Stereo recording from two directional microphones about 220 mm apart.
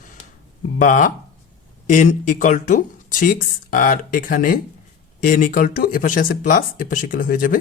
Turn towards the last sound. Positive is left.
turn(degrees=40)  # may be behind; listen again after turning